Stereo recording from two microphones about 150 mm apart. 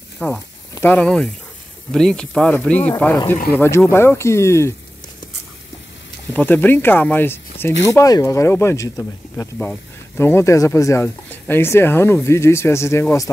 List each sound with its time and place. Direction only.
0.2 s speech: 10° left (ahead or behind)
6.3 s speech: 10° left (ahead or behind)